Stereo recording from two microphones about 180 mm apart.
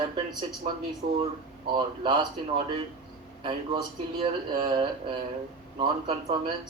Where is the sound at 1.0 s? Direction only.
35° right (ahead or behind).